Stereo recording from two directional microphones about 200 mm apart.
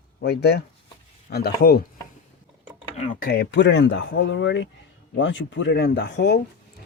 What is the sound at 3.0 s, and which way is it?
Speech, 45° left (ahead or behind).